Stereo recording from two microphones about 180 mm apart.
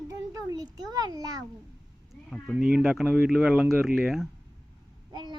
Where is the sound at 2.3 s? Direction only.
5° left (ahead or behind).